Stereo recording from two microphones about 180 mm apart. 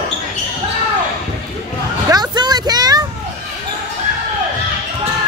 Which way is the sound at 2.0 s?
25° right (ahead or behind).